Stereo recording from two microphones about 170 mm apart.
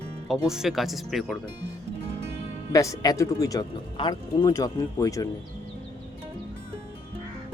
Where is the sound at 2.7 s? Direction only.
20° left (ahead or behind).